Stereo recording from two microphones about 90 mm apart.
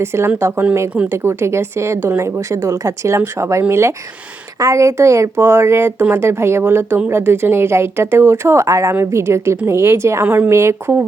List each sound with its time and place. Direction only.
0.0 s a woman's voice: 30° right (ahead or behind)
10.2 s speech: 20° right (ahead or behind)
10.5 s a woman's voice: 30° right (ahead or behind)